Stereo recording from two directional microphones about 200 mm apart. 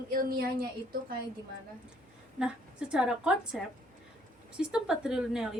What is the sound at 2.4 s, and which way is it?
A woman's voice, 5° right (ahead or behind).